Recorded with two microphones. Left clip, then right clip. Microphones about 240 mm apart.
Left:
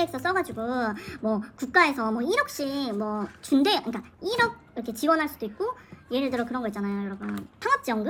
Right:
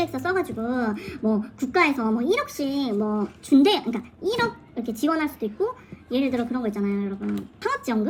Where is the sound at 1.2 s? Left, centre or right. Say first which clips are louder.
Right 2 dB; left.